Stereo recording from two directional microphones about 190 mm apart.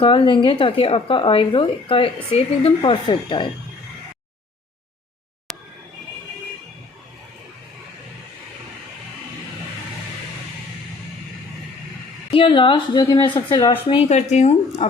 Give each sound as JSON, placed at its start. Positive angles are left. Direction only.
{"t": 0.0, "sound": "speech", "side_deg": 25}
{"t": 12.3, "sound": "speech", "side_deg": 30}